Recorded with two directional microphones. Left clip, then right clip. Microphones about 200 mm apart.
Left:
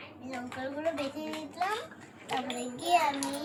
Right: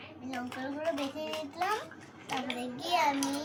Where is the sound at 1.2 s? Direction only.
20° left (ahead or behind).